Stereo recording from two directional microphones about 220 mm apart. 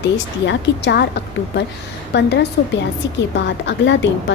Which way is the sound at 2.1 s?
50° left (ahead or behind).